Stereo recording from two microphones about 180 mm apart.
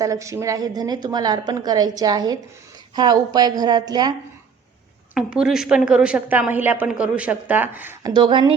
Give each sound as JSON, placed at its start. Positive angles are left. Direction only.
{"t": 0.0, "sound": "a woman's voice", "side_deg": -20}
{"t": 5.1, "sound": "a woman's voice", "side_deg": -5}
{"t": 8.1, "sound": "a woman's voice", "side_deg": -25}